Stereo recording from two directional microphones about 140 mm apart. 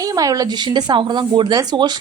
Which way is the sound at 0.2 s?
25° right (ahead or behind).